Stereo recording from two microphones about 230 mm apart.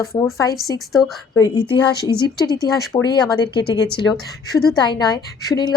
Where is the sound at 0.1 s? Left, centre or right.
Centre.